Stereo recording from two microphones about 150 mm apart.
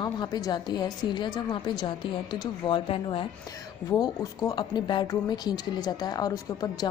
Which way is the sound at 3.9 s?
25° left (ahead or behind).